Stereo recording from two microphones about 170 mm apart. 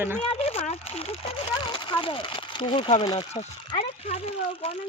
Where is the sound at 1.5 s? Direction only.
30° left (ahead or behind).